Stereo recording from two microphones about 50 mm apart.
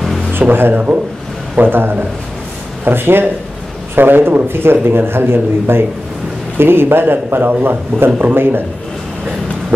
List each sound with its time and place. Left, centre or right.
0.3 s a man's voice: right